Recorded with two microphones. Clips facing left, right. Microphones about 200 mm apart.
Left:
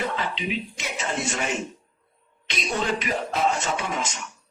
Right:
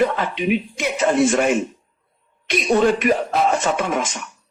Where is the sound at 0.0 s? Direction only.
55° right (ahead or behind).